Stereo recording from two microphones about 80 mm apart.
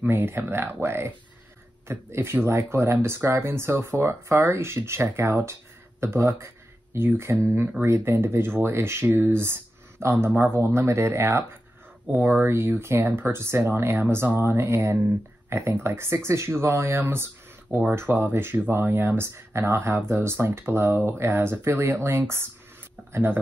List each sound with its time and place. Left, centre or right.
0.1 s speech: right